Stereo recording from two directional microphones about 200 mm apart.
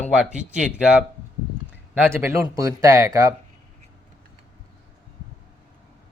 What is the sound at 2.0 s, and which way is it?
Speech, 10° right (ahead or behind).